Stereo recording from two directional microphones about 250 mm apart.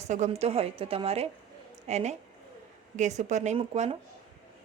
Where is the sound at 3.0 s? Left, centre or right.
Right.